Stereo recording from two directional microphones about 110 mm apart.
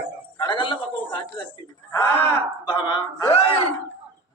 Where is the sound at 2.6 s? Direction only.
45° left (ahead or behind).